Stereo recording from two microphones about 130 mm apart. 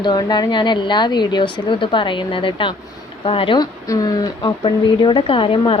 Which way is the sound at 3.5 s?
30° left (ahead or behind).